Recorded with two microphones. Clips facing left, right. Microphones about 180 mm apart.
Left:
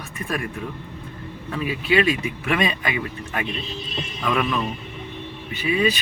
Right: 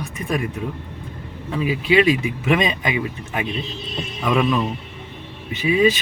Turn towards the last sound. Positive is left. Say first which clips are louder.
# right 4 dB
turn(degrees=-20)  # may be behind; listen again after turning